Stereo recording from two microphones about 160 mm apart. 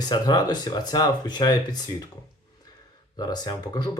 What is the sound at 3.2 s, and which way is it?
Speech, 25° left (ahead or behind).